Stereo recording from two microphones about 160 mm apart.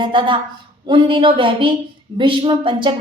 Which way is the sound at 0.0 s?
30° right (ahead or behind).